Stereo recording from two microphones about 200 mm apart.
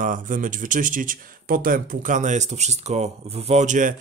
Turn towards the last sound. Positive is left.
turn(degrees=-40)  # may be behind; listen again after turning